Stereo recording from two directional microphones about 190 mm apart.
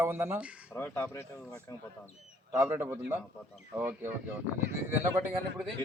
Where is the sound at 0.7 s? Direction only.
10° left (ahead or behind).